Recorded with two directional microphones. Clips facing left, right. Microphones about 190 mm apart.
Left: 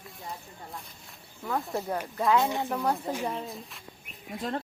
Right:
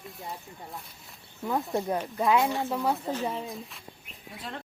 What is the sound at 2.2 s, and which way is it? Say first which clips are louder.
Speech: even; 10° right (ahead or behind).